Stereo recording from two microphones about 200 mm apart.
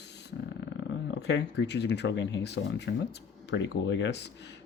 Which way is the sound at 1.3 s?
60° left (ahead or behind).